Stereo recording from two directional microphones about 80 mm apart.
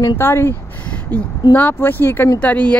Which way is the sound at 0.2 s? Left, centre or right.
Left.